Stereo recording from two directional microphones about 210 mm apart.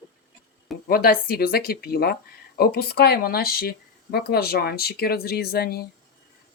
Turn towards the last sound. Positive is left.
turn(degrees=50)  # may be behind; listen again after turning